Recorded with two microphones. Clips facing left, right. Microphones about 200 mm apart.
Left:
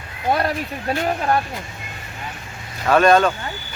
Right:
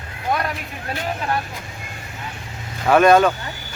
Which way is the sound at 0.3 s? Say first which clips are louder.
Left 3 dB; 30° left (ahead or behind).